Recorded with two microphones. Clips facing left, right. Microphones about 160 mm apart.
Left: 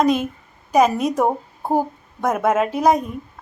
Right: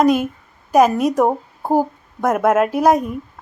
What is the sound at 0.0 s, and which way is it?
A woman's voice, 5° right (ahead or behind).